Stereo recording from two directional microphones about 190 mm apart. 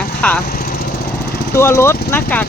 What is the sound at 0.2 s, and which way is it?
Speech, 5° left (ahead or behind).